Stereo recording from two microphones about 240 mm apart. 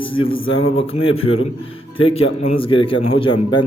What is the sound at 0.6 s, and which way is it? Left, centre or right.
A man's voice, left.